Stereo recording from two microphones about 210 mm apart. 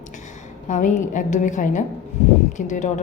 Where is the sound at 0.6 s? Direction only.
35° left (ahead or behind).